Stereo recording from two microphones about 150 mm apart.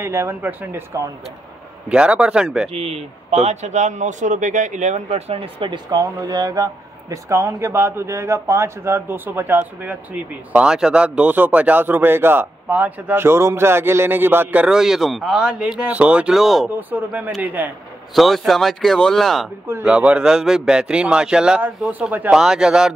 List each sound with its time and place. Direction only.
0.0 s speech: 20° right (ahead or behind)
1.9 s speech: 5° right (ahead or behind)
2.7 s speech: 40° right (ahead or behind); by 17.7 s 10° right (ahead or behind)
18.1 s a man's voice: centre (ahead or behind)
19.7 s a man's voice: 10° right (ahead or behind)